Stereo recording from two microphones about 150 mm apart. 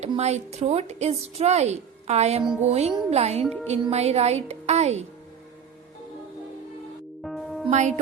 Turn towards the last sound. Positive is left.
turn(degrees=-50)  # may be behind; listen again after turning